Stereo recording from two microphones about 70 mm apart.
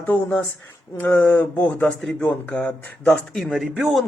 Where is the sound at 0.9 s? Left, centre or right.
Left.